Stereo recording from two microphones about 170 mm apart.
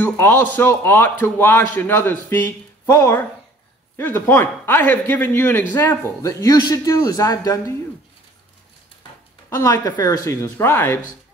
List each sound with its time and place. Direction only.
0.0 s a man's voice: 10° left (ahead or behind)
9.5 s a man's voice: 20° left (ahead or behind)